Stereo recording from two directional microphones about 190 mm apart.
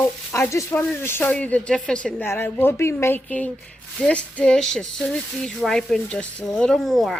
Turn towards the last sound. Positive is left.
turn(degrees=0)  # may be behind; listen again after turning